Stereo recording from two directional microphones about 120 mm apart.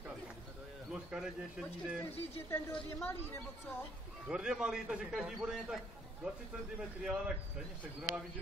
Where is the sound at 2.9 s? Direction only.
20° left (ahead or behind).